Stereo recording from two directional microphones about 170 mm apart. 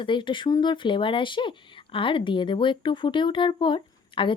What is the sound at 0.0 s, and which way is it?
Speech, 30° left (ahead or behind).